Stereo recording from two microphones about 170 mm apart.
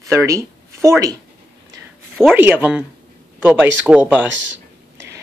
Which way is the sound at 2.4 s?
10° right (ahead or behind).